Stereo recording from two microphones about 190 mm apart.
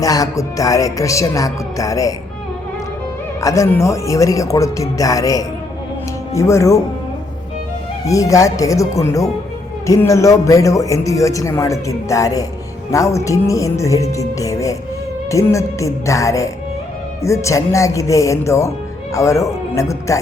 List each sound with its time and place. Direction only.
0.0 s speech: 20° left (ahead or behind)
3.4 s speech: 15° left (ahead or behind)
8.0 s speech: 15° left (ahead or behind)